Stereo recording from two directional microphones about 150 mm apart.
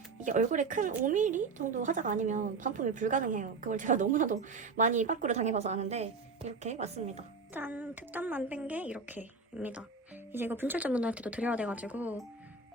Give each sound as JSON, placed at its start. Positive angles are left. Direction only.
{"t": 0.2, "sound": "a woman's voice", "side_deg": -55}
{"t": 7.5, "sound": "a woman's voice", "side_deg": -10}